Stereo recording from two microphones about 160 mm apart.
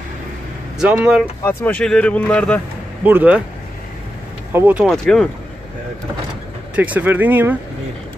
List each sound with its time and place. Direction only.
0.7 s speech: 5° right (ahead or behind)
1.4 s speech: 15° left (ahead or behind)
3.0 s speech: 10° right (ahead or behind)
4.5 s speech: 10° right (ahead or behind)
4.8 s speech: centre (ahead or behind)
6.7 s speech: 10° right (ahead or behind)